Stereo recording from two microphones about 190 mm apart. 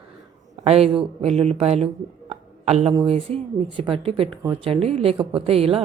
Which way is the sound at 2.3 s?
35° right (ahead or behind).